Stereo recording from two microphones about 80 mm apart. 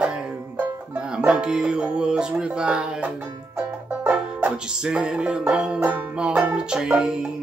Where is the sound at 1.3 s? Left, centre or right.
Centre.